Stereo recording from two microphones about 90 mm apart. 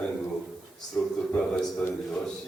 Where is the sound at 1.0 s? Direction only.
15° left (ahead or behind).